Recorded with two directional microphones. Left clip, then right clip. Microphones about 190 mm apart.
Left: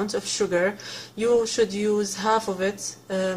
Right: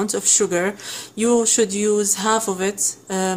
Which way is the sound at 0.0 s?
40° right (ahead or behind).